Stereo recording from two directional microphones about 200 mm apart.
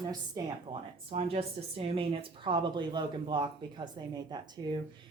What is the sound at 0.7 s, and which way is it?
Speech, 20° right (ahead or behind).